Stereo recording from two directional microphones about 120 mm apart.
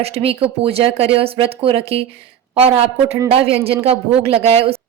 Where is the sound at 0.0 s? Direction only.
55° right (ahead or behind).